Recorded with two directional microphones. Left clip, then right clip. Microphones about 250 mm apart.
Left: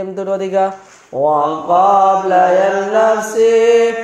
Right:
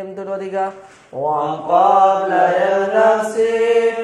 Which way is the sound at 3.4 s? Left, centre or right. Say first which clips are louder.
Left 7 dB; left.